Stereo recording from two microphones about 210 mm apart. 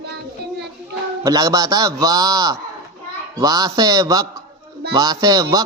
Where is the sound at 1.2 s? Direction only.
15° right (ahead or behind).